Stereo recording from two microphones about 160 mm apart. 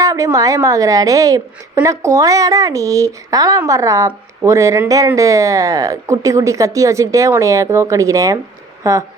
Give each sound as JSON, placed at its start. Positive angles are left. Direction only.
{"t": 0.0, "sound": "a woman's voice", "side_deg": -20}